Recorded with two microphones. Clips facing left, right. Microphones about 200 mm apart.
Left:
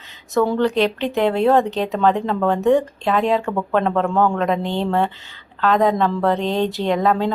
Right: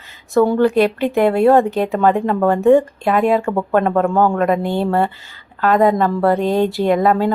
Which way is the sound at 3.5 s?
30° right (ahead or behind).